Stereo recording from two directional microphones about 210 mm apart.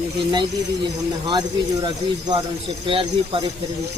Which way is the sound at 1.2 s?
20° right (ahead or behind).